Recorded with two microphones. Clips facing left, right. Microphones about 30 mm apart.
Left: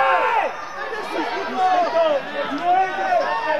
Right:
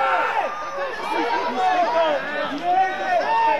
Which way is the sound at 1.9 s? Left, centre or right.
Right.